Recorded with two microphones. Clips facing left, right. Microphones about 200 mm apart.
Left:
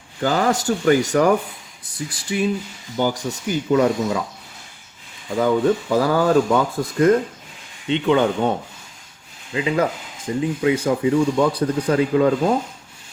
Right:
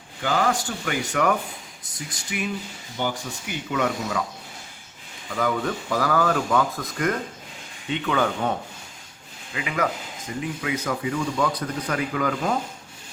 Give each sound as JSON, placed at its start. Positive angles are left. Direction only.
{"t": 0.2, "sound": "speech", "side_deg": 40}
{"t": 5.3, "sound": "speech", "side_deg": 25}
{"t": 9.6, "sound": "speech", "side_deg": 30}